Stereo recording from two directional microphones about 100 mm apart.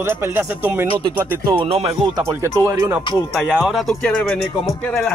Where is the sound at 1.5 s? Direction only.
70° right (ahead or behind).